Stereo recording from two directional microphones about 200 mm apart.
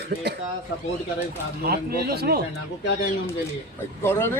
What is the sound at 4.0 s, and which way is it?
Speech, 10° left (ahead or behind).